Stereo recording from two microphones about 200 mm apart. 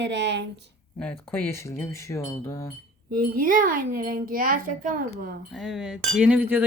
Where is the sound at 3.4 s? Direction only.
45° right (ahead or behind).